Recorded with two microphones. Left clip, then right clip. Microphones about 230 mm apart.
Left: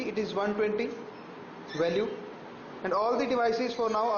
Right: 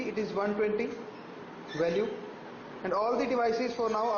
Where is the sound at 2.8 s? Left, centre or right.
Centre.